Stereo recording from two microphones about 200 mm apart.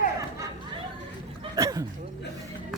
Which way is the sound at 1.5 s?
15° right (ahead or behind).